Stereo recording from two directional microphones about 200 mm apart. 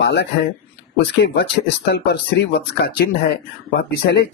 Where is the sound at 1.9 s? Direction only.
55° left (ahead or behind).